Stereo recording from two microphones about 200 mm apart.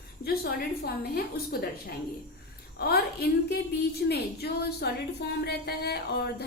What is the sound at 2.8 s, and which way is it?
A woman's voice, 50° left (ahead or behind).